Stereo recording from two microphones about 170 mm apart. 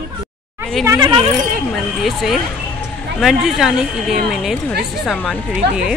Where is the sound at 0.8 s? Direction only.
15° right (ahead or behind).